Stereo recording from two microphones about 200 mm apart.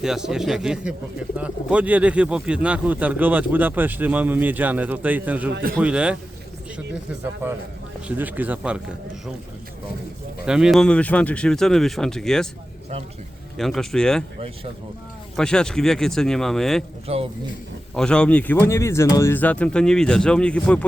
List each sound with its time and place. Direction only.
0.0 s speech: 5° right (ahead or behind)
7.4 s speech: 10° right (ahead or behind)
10.4 s speech: 5° right (ahead or behind)
13.6 s speech: centre (ahead or behind)
15.4 s speech: 5° left (ahead or behind)
17.1 s speech: 30° right (ahead or behind)
17.9 s speech: 5° left (ahead or behind)